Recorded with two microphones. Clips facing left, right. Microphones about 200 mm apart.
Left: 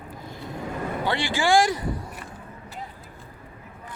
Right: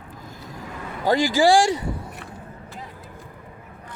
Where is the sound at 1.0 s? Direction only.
40° right (ahead or behind).